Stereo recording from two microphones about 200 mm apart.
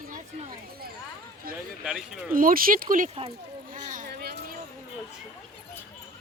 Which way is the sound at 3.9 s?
45° right (ahead or behind).